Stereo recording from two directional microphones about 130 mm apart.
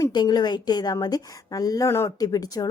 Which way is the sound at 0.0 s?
35° left (ahead or behind).